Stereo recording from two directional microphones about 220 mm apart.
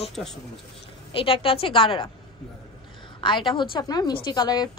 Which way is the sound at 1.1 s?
25° left (ahead or behind).